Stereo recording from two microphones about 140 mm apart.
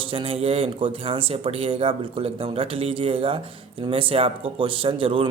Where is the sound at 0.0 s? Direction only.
40° right (ahead or behind).